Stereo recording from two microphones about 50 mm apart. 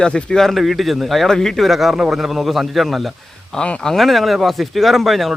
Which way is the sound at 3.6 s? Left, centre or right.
Centre.